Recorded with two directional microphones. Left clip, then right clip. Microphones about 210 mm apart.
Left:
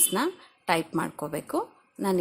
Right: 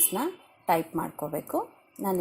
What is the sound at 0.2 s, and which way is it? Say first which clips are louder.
A woman's voice: left 3 dB; 10° left (ahead or behind).